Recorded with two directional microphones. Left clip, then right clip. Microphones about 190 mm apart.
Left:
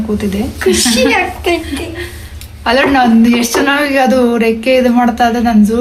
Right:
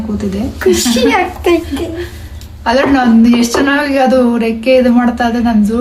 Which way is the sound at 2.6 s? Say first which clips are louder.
Left 1 dB; centre (ahead or behind).